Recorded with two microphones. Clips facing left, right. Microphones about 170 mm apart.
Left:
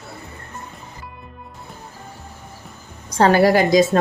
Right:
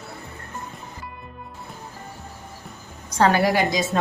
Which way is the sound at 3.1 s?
35° left (ahead or behind).